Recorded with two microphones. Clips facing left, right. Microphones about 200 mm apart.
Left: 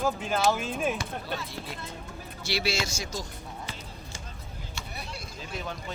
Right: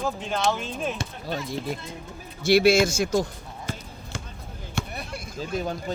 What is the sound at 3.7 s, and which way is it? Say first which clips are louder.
Basketball bounce: right 7 dB; 45° right (ahead or behind).